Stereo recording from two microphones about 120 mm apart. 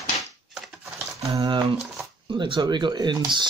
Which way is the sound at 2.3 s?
45° right (ahead or behind).